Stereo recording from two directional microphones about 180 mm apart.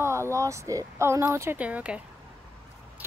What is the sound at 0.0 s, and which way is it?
Speech, 15° right (ahead or behind).